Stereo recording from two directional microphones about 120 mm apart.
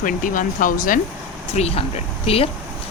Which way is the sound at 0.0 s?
90° left.